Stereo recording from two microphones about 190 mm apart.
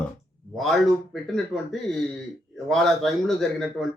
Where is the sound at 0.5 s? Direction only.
Centre (ahead or behind).